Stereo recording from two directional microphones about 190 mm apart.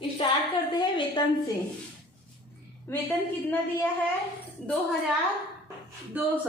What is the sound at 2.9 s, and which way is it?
Speech, 10° left (ahead or behind).